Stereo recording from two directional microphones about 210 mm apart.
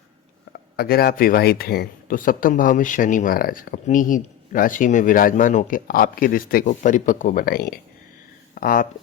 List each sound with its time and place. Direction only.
0.8 s speech: 50° left (ahead or behind)